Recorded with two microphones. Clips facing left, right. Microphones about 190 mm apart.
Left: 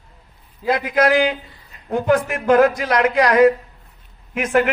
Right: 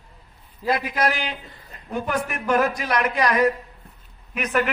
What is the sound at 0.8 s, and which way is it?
A man's voice, 90° left.